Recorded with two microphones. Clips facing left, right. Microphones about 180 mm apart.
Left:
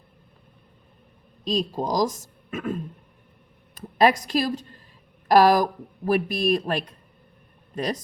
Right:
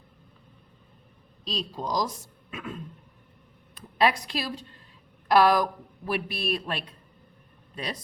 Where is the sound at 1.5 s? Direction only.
45° left (ahead or behind).